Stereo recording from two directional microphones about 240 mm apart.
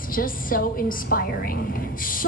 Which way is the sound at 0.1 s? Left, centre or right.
Left.